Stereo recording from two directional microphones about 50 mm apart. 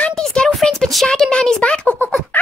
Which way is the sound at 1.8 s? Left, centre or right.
Left.